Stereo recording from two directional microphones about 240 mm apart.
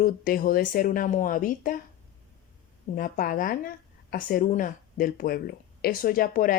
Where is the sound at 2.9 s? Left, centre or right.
Left.